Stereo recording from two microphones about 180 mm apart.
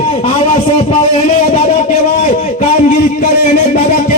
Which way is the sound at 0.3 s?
35° left (ahead or behind).